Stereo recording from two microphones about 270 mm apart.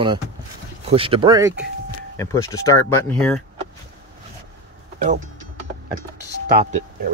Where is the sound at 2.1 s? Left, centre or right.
Centre.